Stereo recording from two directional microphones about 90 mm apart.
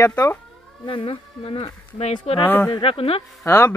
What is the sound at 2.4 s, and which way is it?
Speech, 20° left (ahead or behind).